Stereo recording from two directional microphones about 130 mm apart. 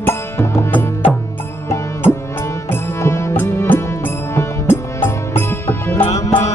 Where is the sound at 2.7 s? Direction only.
20° left (ahead or behind).